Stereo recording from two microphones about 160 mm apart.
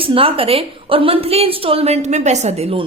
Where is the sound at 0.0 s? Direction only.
35° right (ahead or behind).